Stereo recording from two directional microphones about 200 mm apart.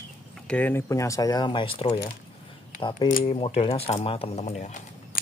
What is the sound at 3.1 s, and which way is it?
Speech, 40° left (ahead or behind).